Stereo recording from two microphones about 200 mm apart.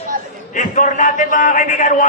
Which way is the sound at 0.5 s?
40° left (ahead or behind).